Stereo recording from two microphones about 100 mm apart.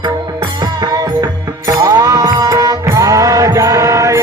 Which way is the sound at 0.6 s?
40° right (ahead or behind).